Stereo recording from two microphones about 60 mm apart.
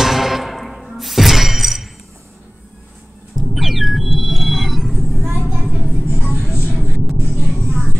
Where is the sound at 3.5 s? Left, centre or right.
Centre.